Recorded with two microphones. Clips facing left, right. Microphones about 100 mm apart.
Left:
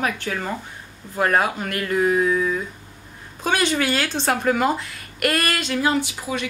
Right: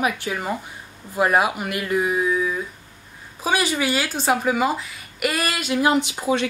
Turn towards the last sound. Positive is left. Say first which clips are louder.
# right 4 dB
turn(degrees=-25)  # may be behind; listen again after turning